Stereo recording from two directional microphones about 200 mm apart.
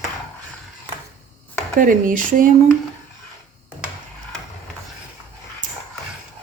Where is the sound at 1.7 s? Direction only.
40° right (ahead or behind).